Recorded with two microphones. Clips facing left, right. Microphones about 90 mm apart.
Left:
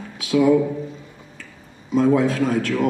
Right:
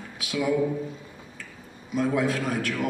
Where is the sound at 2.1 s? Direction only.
30° left (ahead or behind).